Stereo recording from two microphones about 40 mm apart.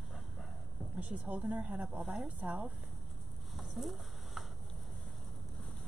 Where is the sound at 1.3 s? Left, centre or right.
Right.